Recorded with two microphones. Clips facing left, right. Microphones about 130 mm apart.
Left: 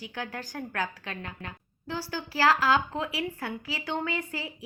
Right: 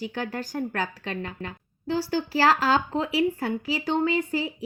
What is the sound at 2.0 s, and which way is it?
A woman's voice, 35° right (ahead or behind).